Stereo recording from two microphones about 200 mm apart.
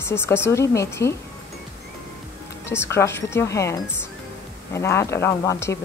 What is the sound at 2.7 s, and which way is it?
Speech, 15° left (ahead or behind).